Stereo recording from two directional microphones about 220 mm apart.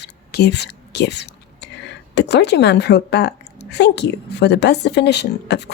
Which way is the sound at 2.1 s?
50° left (ahead or behind).